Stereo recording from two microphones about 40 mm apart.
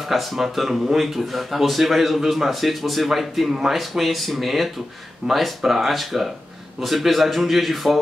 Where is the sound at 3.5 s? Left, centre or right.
Centre.